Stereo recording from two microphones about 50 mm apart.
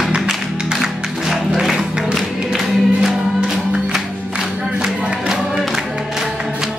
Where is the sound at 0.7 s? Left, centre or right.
Centre.